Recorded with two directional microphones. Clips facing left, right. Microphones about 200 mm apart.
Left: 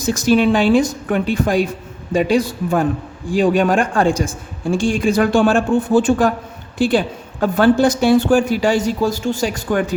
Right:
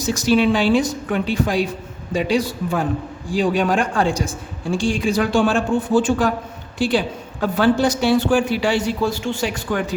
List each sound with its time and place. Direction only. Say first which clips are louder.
0.0 s a woman's voice: left 2 dB; 50° left (ahead or behind)